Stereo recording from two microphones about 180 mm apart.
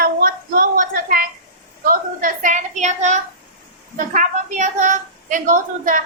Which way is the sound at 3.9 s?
45° right (ahead or behind).